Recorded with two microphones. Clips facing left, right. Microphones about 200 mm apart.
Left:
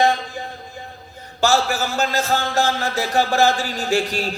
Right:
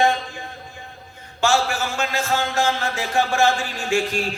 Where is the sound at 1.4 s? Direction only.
40° left (ahead or behind).